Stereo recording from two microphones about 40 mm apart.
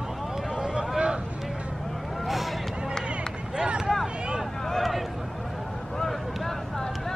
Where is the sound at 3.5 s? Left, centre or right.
Right.